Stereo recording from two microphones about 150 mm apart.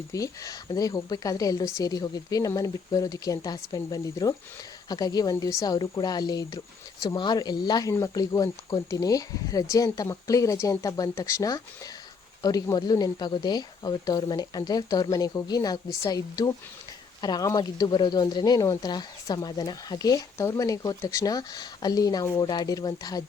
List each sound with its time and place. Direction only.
0.1 s speech: 25° left (ahead or behind)